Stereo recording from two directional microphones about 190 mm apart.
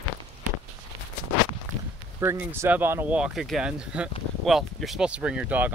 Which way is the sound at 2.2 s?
10° right (ahead or behind).